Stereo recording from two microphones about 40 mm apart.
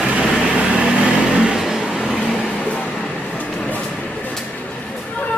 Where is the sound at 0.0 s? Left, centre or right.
Right.